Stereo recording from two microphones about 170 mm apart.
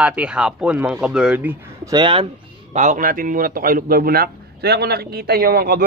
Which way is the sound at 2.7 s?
45° right (ahead or behind).